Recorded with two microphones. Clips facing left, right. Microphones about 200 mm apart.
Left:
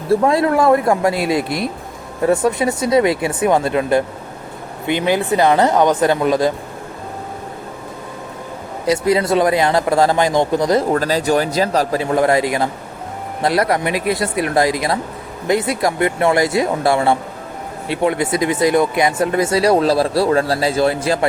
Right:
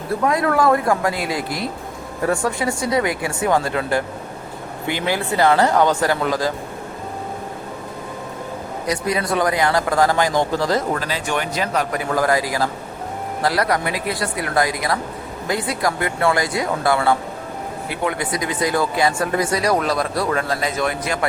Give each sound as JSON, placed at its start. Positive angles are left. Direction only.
{"t": 0.1, "sound": "speech", "side_deg": 30}
{"t": 8.9, "sound": "speech", "side_deg": 25}
{"t": 10.9, "sound": "a man's voice", "side_deg": 40}